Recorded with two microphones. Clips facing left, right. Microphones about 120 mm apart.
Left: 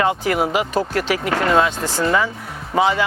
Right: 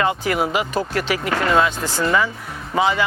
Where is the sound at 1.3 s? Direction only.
35° left (ahead or behind).